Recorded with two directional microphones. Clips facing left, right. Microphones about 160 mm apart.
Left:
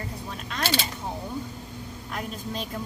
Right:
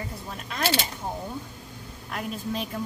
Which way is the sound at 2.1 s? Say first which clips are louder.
Right 3 dB; centre (ahead or behind).